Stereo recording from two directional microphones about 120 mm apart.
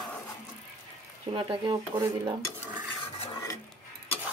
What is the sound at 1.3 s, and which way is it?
Speech, 45° right (ahead or behind).